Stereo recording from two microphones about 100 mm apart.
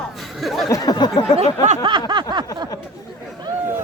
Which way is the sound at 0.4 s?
Centre (ahead or behind).